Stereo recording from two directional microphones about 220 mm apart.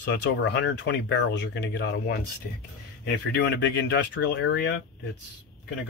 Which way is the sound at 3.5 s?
50° left (ahead or behind).